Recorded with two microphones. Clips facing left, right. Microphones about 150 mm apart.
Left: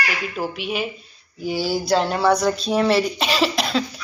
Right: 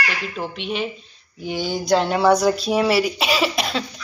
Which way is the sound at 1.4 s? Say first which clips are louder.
Left 2 dB; 5° left (ahead or behind).